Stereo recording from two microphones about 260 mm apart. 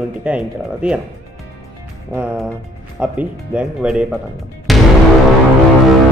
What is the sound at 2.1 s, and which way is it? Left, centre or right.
Speech, centre.